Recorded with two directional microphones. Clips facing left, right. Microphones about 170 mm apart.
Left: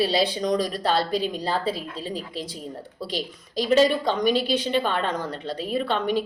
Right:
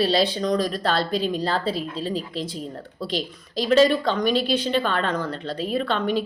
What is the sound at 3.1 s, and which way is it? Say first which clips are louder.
Speech: right 1 dB; 10° left (ahead or behind).